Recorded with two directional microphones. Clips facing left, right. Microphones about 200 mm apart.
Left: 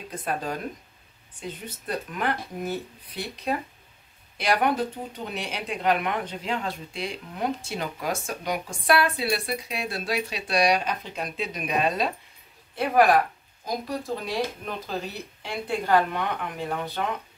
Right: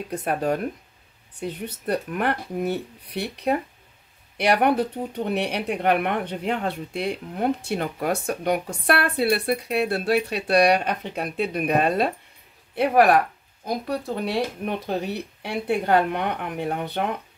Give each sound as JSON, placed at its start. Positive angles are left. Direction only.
{"t": 0.1, "sound": "speech", "side_deg": -65}